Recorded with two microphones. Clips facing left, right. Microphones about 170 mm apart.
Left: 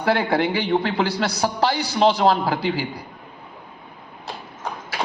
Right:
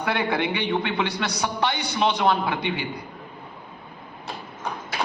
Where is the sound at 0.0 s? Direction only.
35° left (ahead or behind).